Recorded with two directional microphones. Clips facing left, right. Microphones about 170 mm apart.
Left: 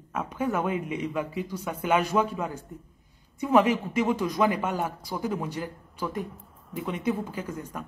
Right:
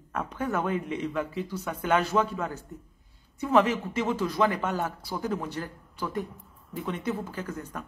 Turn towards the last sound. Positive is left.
turn(degrees=10)  # may be behind; listen again after turning